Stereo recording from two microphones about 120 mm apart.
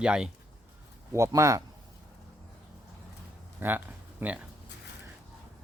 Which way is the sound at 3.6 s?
15° right (ahead or behind).